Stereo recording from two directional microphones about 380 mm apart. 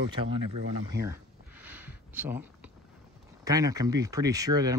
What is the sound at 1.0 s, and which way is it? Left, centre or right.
Speech, right.